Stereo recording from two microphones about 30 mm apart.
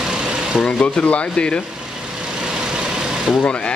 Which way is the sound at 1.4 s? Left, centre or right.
Left.